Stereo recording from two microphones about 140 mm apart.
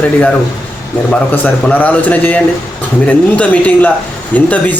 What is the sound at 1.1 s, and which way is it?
Speech, 10° left (ahead or behind).